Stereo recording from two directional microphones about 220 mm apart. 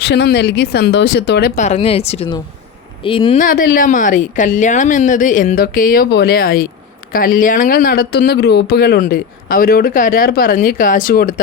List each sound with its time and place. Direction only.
0.0 s speech: 50° left (ahead or behind)
1.6 s speech: 30° left (ahead or behind)
3.3 s speech: 40° left (ahead or behind)